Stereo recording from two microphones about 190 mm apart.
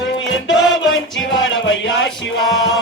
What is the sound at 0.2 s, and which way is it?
Music, 80° left.